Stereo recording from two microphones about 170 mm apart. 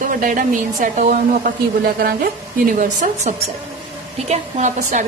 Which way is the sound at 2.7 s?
45° right (ahead or behind).